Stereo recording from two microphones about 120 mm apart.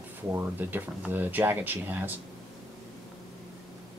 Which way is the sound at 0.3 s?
15° right (ahead or behind).